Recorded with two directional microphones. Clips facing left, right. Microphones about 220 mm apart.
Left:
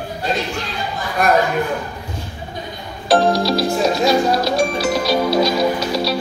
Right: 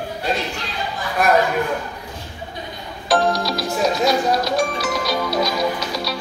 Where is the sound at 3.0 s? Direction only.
30° left (ahead or behind).